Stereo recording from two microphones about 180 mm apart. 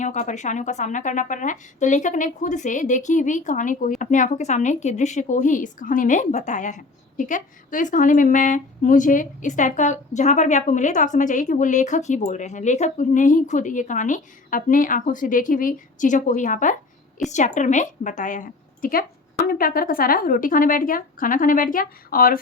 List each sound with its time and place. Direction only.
0.0 s a woman's voice: 40° left (ahead or behind)